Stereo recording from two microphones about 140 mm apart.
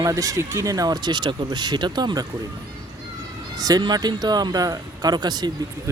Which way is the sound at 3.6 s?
30° right (ahead or behind).